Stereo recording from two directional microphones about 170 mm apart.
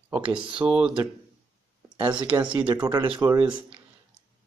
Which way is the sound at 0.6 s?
5° right (ahead or behind).